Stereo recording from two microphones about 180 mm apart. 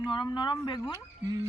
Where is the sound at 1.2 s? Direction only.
20° right (ahead or behind).